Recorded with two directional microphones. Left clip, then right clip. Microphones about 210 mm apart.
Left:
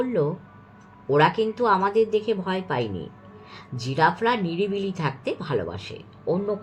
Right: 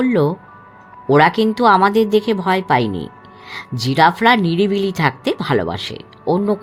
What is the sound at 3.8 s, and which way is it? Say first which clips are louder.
Speech: right 9 dB; 55° right (ahead or behind).